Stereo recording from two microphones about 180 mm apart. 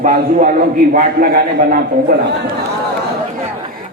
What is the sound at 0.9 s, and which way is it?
A man's voice, 55° right (ahead or behind).